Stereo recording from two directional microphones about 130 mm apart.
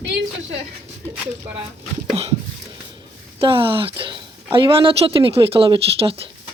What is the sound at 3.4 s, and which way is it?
A woman's voice, 45° right (ahead or behind).